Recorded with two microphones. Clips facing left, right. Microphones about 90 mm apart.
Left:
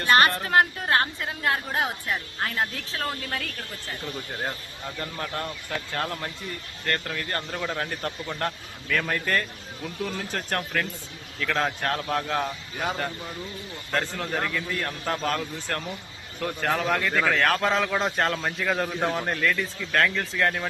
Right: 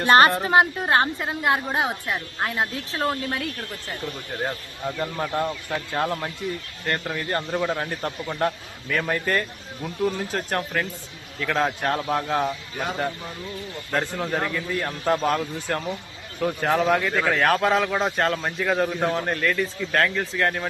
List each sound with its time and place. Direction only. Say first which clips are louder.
0.0 s a woman's voice: right 4 dB; 30° right (ahead or behind)
0.3 s a woman's voice: right 3 dB; 15° right (ahead or behind)
4.9 s a man's voice: right 6 dB; 15° right (ahead or behind)